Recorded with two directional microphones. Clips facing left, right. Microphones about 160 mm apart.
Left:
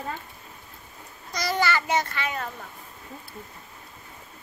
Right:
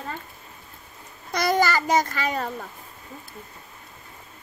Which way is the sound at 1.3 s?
50° right (ahead or behind).